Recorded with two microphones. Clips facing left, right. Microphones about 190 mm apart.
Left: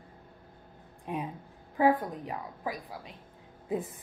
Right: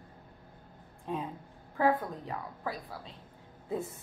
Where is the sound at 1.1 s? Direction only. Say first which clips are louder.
Left 1 dB; 15° left (ahead or behind).